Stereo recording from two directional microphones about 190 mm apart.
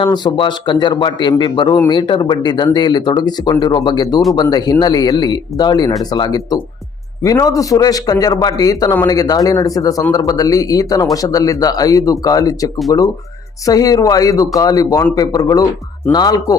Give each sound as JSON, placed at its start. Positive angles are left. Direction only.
{"t": 0.0, "sound": "speech", "side_deg": 25}